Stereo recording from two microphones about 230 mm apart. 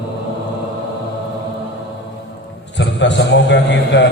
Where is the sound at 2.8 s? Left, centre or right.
Left.